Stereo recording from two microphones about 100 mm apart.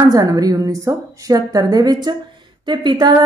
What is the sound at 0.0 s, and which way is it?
A woman's voice, 40° right (ahead or behind).